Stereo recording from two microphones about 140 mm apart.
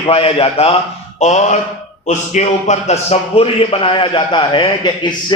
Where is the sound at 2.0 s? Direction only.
55° left (ahead or behind).